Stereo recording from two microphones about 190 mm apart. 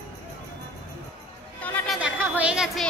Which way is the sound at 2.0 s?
5° right (ahead or behind).